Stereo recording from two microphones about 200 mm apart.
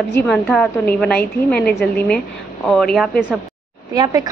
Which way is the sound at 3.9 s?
20° right (ahead or behind).